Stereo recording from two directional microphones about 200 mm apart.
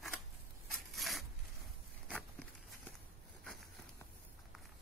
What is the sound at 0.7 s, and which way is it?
Zipper, centre (ahead or behind).